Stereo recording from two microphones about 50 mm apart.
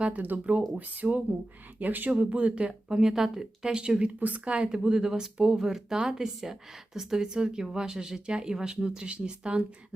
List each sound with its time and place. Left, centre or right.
0.0 s speech: right
4.2 s speech: right